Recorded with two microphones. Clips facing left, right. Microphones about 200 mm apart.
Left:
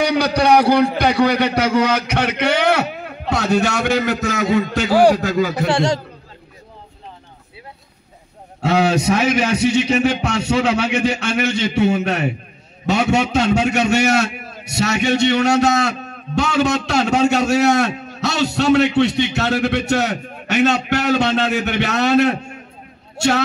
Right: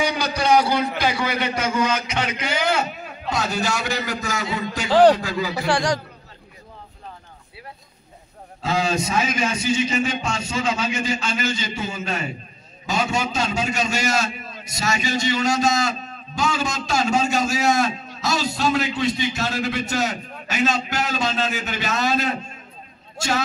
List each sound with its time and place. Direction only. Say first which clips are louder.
0.0 s a sound: left 6 dB; 60° left (ahead or behind)
0.9 s a man's voice: left 8 dB; 65° left (ahead or behind)
4.8 s a man's voice: even; 10° left (ahead or behind)
5.2 s a man's voice: left 7 dB; 45° left (ahead or behind)
5.7 s a man's voice: even; 25° left (ahead or behind)
8.5 s a man's voice: left 6 dB; 70° left (ahead or behind)